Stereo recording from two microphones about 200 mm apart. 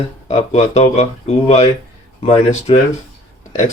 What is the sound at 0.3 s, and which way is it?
Speech, 30° left (ahead or behind).